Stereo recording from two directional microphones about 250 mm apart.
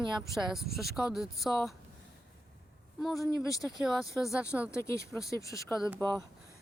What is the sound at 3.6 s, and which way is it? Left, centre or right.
Speech, centre.